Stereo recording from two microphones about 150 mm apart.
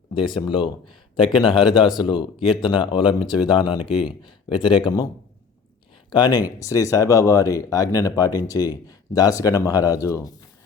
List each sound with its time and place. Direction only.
0.1 s speech: 35° left (ahead or behind)
3.8 s speech: 5° right (ahead or behind)
4.2 s speech: 35° left (ahead or behind)
6.1 s speech: 25° left (ahead or behind)